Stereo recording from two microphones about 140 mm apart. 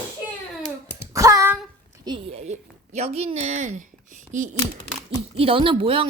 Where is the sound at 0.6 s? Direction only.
50° left (ahead or behind).